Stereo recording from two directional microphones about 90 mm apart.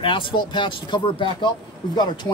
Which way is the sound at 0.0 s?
70° left (ahead or behind).